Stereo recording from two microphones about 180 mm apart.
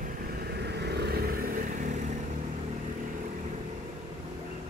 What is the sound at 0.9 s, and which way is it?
Vehicle, 65° right (ahead or behind).